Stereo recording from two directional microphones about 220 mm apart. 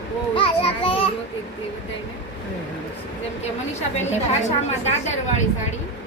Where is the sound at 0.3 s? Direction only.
25° left (ahead or behind).